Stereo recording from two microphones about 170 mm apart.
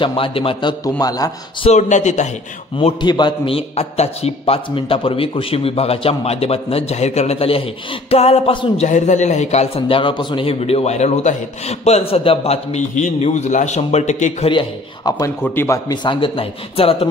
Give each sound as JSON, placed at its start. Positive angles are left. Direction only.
{"t": 0.0, "sound": "a man's voice", "side_deg": 30}
{"t": 1.7, "sound": "a man's voice", "side_deg": 45}
{"t": 2.8, "sound": "a man's voice", "side_deg": 25}
{"t": 14.5, "sound": "a man's voice", "side_deg": 25}
{"t": 15.9, "sound": "a man's voice", "side_deg": 25}